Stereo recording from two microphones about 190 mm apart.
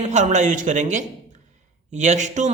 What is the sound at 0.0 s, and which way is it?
A man's voice, 40° right (ahead or behind).